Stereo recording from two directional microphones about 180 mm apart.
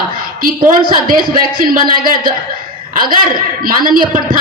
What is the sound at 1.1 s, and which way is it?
A man's voice, 50° right (ahead or behind).